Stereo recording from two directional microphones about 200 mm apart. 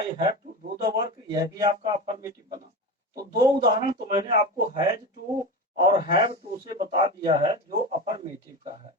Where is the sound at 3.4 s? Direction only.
20° right (ahead or behind).